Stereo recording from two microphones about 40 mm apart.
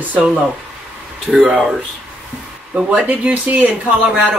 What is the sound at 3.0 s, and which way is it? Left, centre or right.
Speech, right.